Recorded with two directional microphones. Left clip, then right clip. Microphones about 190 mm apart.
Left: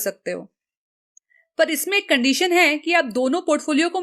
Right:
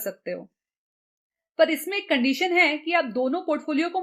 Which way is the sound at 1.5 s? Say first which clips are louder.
Left 2 dB; 35° left (ahead or behind).